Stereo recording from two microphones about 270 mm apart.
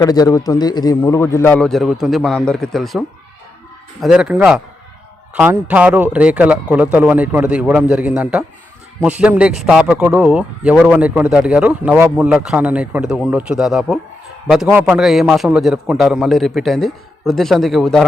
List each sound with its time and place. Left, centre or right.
0.0 s a man's voice: centre
4.0 s a man's voice: centre